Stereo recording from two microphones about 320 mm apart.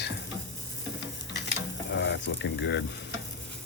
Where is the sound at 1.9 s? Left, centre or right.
Left.